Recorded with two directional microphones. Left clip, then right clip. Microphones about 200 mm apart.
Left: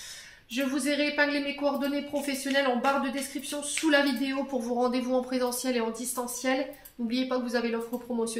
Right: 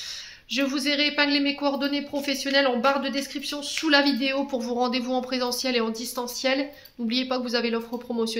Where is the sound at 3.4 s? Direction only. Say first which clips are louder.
Right 3 dB; 40° right (ahead or behind).